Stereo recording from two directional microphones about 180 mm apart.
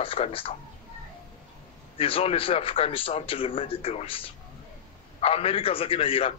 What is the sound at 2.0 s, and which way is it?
A man's voice, 30° left (ahead or behind).